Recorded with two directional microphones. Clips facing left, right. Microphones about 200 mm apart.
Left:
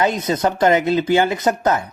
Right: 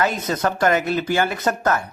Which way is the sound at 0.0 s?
20° left (ahead or behind).